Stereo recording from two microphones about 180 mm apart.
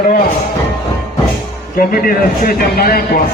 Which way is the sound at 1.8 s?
55° left (ahead or behind).